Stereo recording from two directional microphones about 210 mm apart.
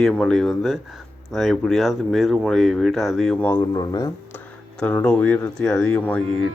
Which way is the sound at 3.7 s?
20° left (ahead or behind).